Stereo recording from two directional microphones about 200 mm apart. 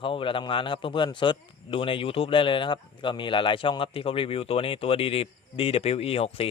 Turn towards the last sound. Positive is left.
turn(degrees=30)  # may be behind; listen again after turning